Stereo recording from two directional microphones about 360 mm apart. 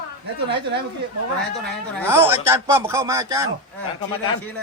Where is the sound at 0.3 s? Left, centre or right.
Right.